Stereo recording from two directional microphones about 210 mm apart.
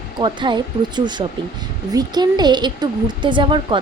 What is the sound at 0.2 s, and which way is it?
Speech, 20° right (ahead or behind).